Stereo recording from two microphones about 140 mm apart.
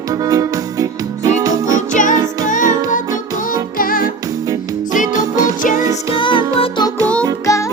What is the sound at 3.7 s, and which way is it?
Music, 90° left.